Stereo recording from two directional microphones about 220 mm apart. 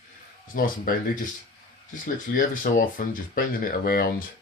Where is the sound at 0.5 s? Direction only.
40° left (ahead or behind).